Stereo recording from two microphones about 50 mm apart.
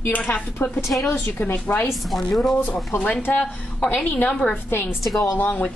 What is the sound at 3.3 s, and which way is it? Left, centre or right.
Speech, left.